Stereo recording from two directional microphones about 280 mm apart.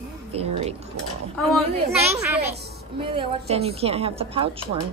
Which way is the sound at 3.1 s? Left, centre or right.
Right.